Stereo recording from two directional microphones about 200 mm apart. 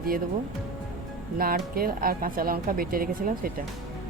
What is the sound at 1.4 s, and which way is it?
Speech, 45° right (ahead or behind).